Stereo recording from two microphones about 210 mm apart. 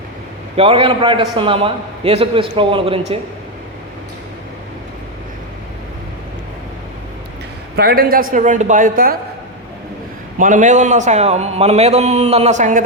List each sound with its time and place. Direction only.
0.5 s a man's voice: 25° right (ahead or behind)
7.8 s a man's voice: 45° right (ahead or behind)
10.3 s a man's voice: 40° right (ahead or behind)